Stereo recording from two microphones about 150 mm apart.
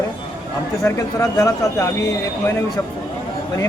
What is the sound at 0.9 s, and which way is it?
Speech, 20° left (ahead or behind).